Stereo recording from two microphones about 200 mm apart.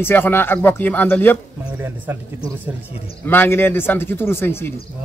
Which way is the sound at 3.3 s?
10° left (ahead or behind).